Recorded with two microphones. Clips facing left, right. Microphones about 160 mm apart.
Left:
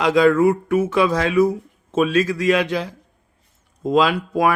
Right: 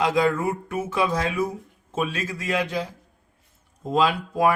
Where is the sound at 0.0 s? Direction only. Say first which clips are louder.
Left 7 dB; 80° left.